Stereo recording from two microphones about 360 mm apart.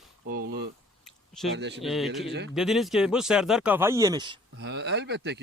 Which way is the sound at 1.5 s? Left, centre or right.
Right.